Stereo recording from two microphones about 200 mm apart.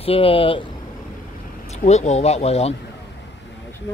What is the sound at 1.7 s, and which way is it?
Speech, 35° left (ahead or behind).